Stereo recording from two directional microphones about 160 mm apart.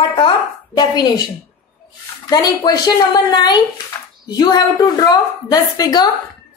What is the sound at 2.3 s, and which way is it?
A woman's voice, 25° left (ahead or behind).